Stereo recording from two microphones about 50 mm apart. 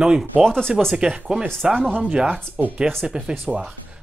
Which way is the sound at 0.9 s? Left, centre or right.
Centre.